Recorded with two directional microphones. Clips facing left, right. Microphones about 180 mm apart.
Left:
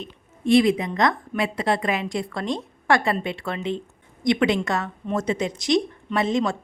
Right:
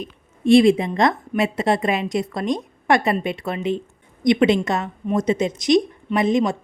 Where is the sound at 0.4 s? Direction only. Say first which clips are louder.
Right 4 dB; 25° right (ahead or behind).